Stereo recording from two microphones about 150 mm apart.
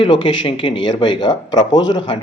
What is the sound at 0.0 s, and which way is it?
Speech, 35° left (ahead or behind).